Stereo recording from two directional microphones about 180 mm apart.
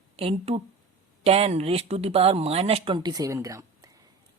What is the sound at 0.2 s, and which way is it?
Speech, 35° right (ahead or behind).